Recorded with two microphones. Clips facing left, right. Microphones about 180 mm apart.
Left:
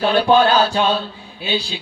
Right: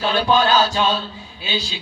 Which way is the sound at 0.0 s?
55° left (ahead or behind).